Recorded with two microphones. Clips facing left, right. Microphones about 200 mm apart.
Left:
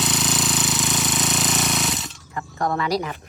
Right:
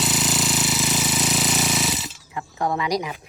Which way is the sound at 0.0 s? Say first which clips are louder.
Even; centre (ahead or behind).